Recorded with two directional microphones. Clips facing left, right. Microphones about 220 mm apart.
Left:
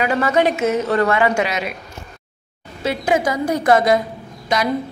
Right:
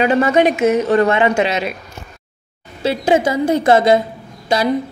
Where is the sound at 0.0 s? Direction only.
25° right (ahead or behind).